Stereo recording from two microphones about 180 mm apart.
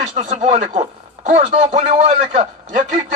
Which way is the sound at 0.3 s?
40° right (ahead or behind).